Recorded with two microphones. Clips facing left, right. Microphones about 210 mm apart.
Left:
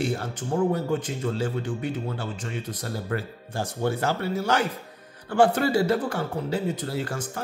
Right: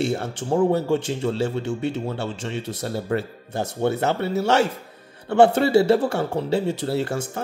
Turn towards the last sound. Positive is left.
turn(degrees=-25)  # may be behind; listen again after turning